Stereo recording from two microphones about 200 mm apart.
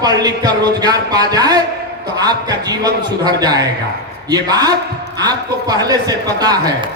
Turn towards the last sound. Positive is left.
turn(degrees=-20)  # may be behind; listen again after turning